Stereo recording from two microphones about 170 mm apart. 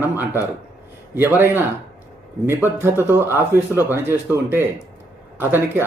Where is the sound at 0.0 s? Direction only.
10° right (ahead or behind).